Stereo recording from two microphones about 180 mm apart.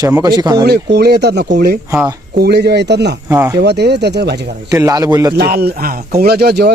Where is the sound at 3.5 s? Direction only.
70° right (ahead or behind).